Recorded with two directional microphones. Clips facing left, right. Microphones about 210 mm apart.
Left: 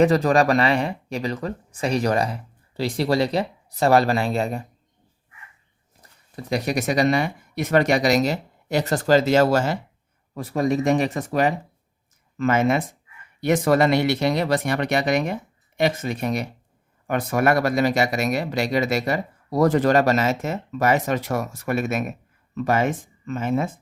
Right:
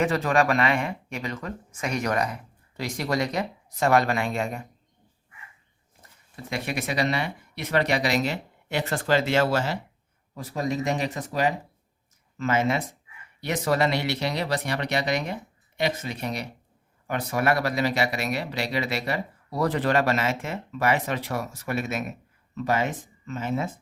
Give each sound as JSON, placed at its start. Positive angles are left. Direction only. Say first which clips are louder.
{"t": 0.0, "sound": "speech", "louder": "left 6 dB", "side_deg": 35}
{"t": 6.0, "sound": "speech", "louder": "left 5 dB", "side_deg": 35}
{"t": 10.3, "sound": "speech", "louder": "left 6 dB", "side_deg": 55}